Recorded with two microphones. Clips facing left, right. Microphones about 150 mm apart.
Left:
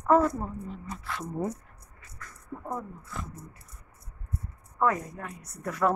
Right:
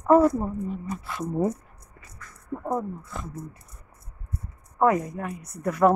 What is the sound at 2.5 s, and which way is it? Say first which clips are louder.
Speech: right 7 dB; 45° right (ahead or behind).